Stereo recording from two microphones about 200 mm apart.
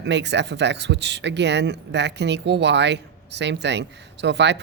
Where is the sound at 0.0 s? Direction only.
60° right (ahead or behind).